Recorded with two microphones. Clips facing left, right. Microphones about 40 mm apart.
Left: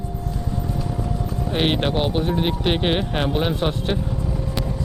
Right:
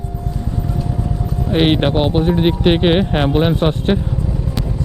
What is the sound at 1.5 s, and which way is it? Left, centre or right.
Speech, right.